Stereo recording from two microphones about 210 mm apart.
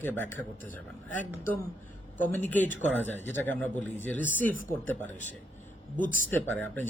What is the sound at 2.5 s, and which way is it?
Speech, 10° left (ahead or behind).